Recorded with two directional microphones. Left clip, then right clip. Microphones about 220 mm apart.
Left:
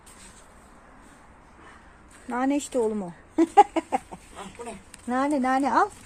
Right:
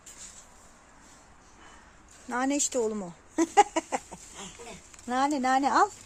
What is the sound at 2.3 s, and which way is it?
Speech, 10° right (ahead or behind).